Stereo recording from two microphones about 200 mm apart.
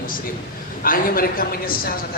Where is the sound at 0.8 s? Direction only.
45° left (ahead or behind).